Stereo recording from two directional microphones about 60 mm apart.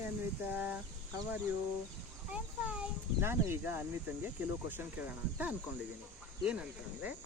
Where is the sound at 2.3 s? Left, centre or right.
Right.